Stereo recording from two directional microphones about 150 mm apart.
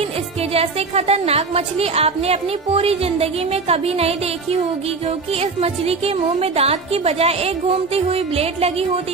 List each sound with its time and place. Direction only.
0.5 s a woman's voice: 45° right (ahead or behind)